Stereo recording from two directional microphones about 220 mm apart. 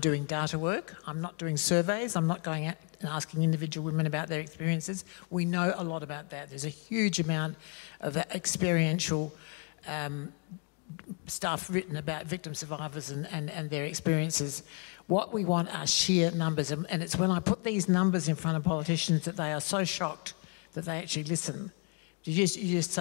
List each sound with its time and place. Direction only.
0.0 s speech: 10° left (ahead or behind)
11.4 s speech: 10° left (ahead or behind)
15.5 s speech: 10° left (ahead or behind)